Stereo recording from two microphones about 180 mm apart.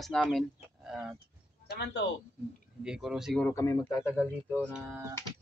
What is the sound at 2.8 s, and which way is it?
Speech, 5° right (ahead or behind).